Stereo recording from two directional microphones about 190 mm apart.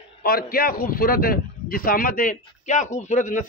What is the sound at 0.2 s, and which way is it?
A man's voice, 50° left (ahead or behind).